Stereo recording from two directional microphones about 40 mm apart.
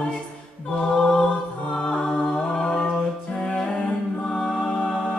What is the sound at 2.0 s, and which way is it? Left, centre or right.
A capella, centre.